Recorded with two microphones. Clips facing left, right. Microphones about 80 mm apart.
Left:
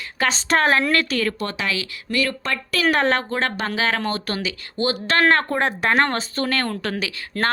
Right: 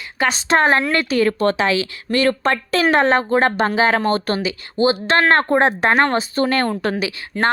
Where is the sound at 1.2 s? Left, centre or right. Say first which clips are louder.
Right 8 dB; right.